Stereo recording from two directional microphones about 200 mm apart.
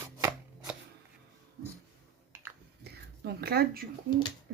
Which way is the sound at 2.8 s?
50° right (ahead or behind).